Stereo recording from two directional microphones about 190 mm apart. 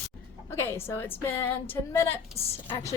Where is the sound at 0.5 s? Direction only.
15° left (ahead or behind).